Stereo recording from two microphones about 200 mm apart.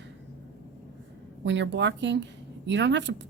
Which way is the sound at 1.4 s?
65° right (ahead or behind).